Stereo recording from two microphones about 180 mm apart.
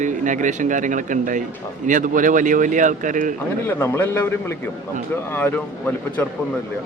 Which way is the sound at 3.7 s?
10° left (ahead or behind).